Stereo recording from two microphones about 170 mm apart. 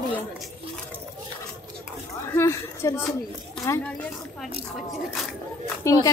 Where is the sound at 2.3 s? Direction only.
15° left (ahead or behind).